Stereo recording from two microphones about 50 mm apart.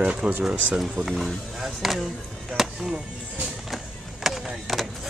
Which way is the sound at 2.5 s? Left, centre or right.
Centre.